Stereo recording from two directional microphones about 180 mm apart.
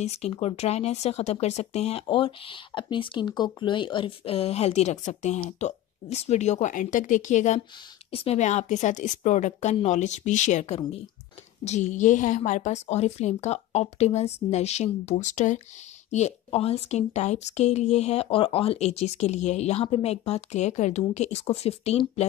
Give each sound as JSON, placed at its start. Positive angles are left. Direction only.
{"t": 0.0, "sound": "speech", "side_deg": 35}